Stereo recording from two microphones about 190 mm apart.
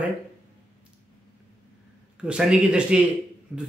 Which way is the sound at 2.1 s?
5° right (ahead or behind).